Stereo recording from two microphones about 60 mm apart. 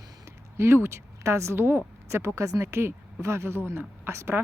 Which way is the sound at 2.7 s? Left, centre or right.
Right.